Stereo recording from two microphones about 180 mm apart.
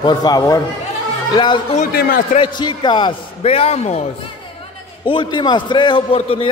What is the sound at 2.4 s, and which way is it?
A man's voice, 25° left (ahead or behind).